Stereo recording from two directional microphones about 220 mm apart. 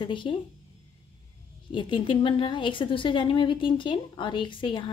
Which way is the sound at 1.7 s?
20° left (ahead or behind).